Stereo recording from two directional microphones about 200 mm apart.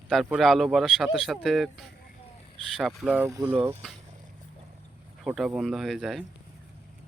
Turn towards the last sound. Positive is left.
turn(degrees=0)  # may be behind; listen again after turning